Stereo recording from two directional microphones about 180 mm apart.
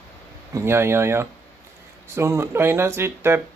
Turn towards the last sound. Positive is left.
turn(degrees=-15)  # may be behind; listen again after turning